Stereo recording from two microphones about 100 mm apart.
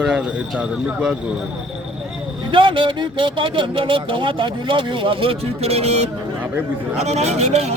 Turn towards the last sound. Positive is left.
turn(degrees=-90)